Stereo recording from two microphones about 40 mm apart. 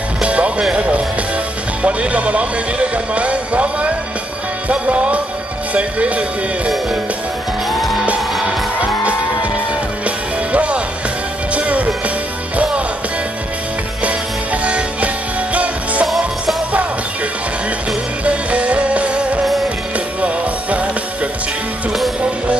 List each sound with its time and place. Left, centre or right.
0.2 s music: right
1.8 s speech: right
4.6 s music: right
5.7 s speech: right
10.0 s music: right
14.0 s music: right
18.2 s music: right